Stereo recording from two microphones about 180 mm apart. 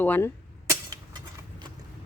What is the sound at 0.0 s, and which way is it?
Speech, 10° left (ahead or behind).